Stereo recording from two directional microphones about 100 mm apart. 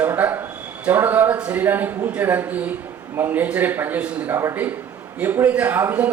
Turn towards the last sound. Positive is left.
turn(degrees=-20)  # may be behind; listen again after turning